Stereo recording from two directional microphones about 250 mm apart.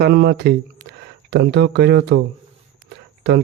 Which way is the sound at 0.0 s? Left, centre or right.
Right.